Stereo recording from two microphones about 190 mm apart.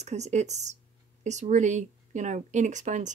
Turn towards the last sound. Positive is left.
turn(degrees=-40)  # may be behind; listen again after turning